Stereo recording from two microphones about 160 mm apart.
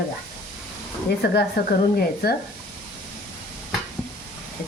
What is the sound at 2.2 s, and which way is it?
Speech, 70° left (ahead or behind).